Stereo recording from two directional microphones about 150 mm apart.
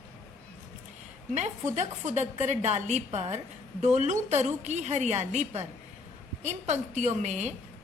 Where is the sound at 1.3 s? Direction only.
50° right (ahead or behind).